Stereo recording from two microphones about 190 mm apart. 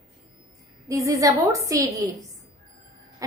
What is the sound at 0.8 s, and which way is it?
A woman's voice, 15° right (ahead or behind).